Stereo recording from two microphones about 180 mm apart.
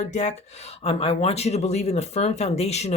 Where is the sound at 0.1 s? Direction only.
40° left (ahead or behind).